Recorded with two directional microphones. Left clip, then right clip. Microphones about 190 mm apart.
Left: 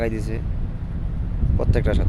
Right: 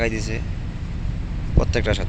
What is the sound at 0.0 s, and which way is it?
Speech, 10° left (ahead or behind).